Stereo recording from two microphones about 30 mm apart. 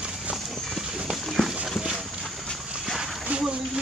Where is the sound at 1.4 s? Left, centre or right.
Centre.